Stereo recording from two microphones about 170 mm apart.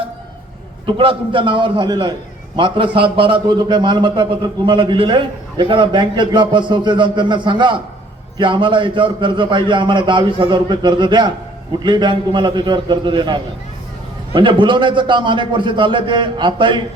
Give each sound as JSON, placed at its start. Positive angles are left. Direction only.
{"t": 0.9, "sound": "a man's voice", "side_deg": -30}